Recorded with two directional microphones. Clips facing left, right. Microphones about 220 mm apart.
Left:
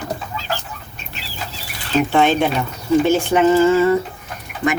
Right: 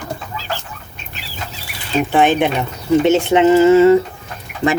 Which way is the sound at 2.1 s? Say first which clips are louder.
Right 3 dB; 15° right (ahead or behind).